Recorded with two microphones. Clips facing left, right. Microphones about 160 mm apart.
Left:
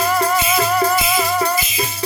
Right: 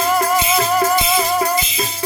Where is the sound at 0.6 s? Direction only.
20° right (ahead or behind).